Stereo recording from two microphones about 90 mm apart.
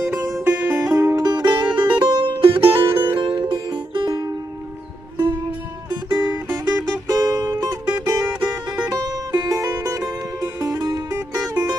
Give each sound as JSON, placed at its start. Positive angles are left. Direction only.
{"t": 0.1, "sound": "music", "side_deg": -25}
{"t": 0.9, "sound": "music", "side_deg": -35}
{"t": 1.2, "sound": "music", "side_deg": -50}
{"t": 4.1, "sound": "music", "side_deg": -45}
{"t": 5.9, "sound": "music", "side_deg": -55}
{"t": 6.6, "sound": "music", "side_deg": -40}